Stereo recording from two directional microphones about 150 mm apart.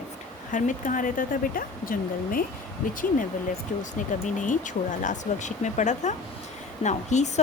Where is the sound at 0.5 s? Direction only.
60° left (ahead or behind).